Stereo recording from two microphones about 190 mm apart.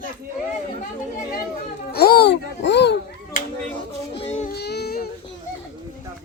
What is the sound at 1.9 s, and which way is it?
A child's voice, 55° left (ahead or behind).